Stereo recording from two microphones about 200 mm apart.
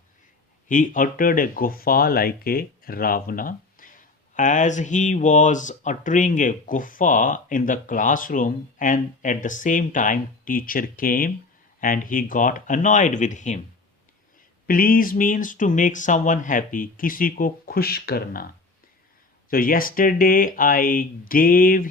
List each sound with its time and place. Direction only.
0.7 s speech: 40° left (ahead or behind)
14.7 s speech: 45° left (ahead or behind)
19.5 s speech: 45° left (ahead or behind)